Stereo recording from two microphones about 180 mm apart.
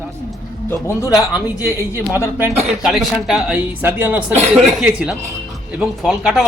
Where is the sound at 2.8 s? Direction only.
Centre (ahead or behind).